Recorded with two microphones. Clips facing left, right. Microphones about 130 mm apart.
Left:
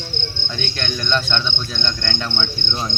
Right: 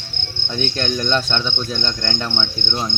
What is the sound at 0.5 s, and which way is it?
Cricket, 40° right (ahead or behind).